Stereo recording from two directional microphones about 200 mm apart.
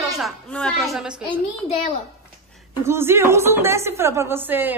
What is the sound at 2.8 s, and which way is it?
A woman's voice, 10° right (ahead or behind).